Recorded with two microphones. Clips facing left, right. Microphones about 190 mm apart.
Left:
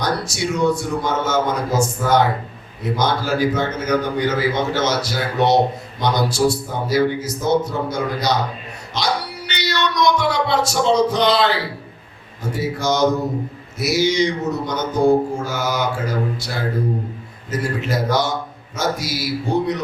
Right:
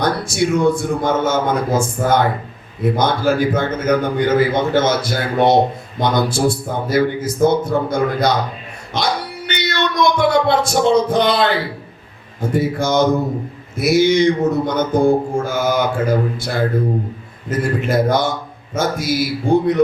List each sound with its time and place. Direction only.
0.0 s a man's voice: 55° right (ahead or behind)